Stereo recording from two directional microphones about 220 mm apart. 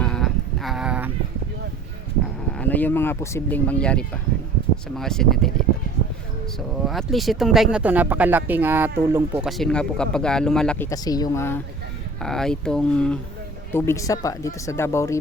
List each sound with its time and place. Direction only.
0.0 s sheep: centre (ahead or behind)
2.5 s speech: 5° left (ahead or behind)
6.8 s speech: centre (ahead or behind)